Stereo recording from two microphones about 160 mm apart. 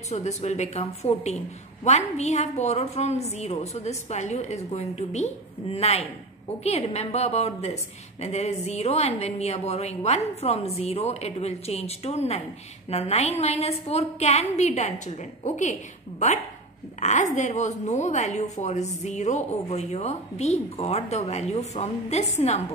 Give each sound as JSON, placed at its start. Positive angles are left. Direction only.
{"t": 0.1, "sound": "a woman's voice", "side_deg": 45}
{"t": 17.0, "sound": "a woman's voice", "side_deg": 50}